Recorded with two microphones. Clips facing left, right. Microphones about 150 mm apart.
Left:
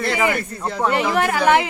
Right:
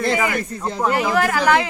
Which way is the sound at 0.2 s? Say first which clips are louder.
Left 1 dB; 15° left (ahead or behind).